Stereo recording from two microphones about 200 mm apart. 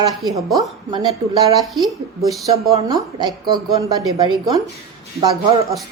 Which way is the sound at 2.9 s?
20° right (ahead or behind).